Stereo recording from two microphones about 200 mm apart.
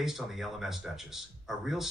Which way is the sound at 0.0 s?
Centre (ahead or behind).